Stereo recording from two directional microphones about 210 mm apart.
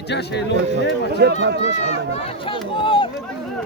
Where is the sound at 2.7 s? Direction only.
25° left (ahead or behind).